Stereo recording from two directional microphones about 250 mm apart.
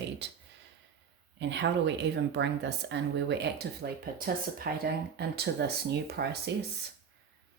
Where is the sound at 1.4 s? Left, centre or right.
Right.